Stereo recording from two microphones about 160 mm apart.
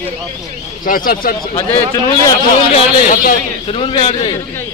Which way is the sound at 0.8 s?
60° left (ahead or behind).